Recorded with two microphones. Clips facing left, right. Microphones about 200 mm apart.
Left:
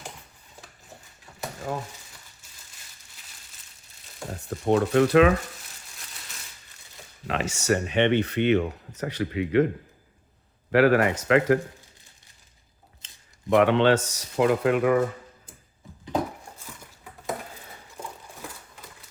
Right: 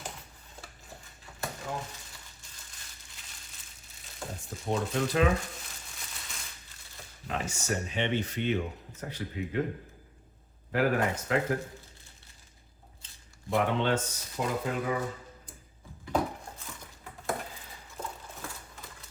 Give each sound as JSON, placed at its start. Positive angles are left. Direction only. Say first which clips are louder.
{"t": 4.4, "sound": "speech", "louder": "left 10 dB", "side_deg": 65}
{"t": 7.3, "sound": "speech", "louder": "left 8 dB", "side_deg": 80}
{"t": 10.7, "sound": "speech", "louder": "left 8 dB", "side_deg": 80}
{"t": 13.5, "sound": "speech", "louder": "left 9 dB", "side_deg": 85}